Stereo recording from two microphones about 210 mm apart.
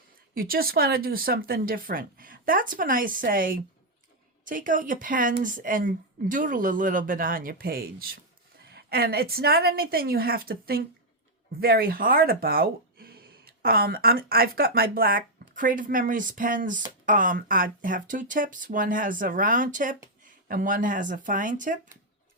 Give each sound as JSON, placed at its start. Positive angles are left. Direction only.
{"t": 0.3, "sound": "a woman's voice", "side_deg": -45}